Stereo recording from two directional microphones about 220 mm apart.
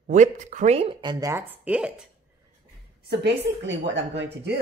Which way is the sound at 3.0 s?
50° right (ahead or behind).